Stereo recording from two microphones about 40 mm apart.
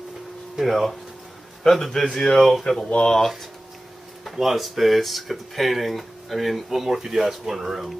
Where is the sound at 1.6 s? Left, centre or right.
Centre.